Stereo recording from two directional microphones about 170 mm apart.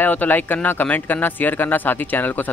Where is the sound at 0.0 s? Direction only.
10° left (ahead or behind).